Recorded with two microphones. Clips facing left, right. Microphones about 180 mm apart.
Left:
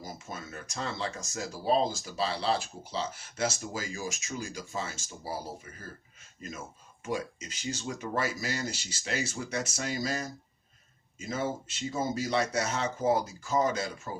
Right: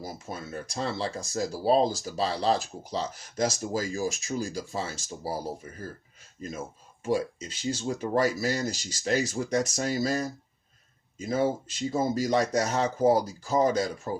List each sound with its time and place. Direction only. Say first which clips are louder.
0.0 s speech: right 4 dB; 35° right (ahead or behind)
6.4 s speech: right 5 dB; 30° right (ahead or behind)